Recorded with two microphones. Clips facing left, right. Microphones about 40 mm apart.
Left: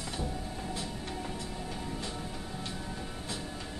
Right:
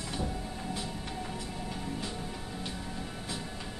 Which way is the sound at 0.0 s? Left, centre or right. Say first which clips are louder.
Right 1 dB; centre.